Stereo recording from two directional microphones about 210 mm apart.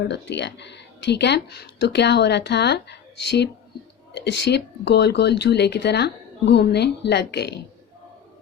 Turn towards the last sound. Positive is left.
turn(degrees=50)  # may be behind; listen again after turning